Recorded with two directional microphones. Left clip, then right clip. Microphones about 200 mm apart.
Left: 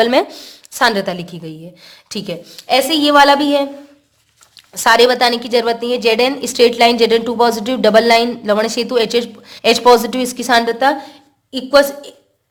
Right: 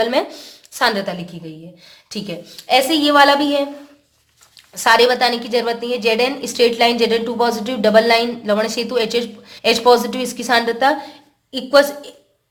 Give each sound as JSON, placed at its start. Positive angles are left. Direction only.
{"t": 0.0, "sound": "a woman's voice", "side_deg": 35}